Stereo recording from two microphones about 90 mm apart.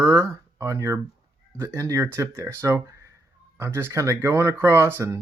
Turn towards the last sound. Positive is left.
turn(degrees=-30)  # may be behind; listen again after turning